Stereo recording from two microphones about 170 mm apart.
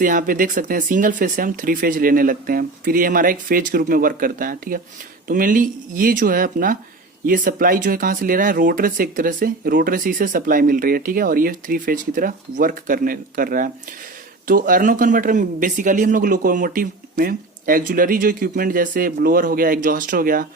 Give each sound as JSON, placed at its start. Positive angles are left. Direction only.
{"t": 0.0, "sound": "speech", "side_deg": -55}